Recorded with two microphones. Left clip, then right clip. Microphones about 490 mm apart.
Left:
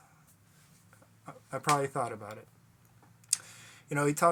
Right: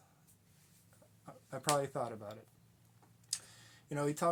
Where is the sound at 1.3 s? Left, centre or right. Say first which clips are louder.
Left 6 dB; right.